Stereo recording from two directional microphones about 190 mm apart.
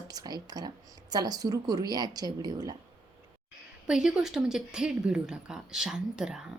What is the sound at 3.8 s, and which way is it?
Speech, 5° right (ahead or behind).